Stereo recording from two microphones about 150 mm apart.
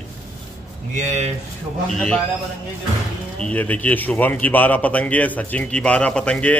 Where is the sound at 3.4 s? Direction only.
10° left (ahead or behind).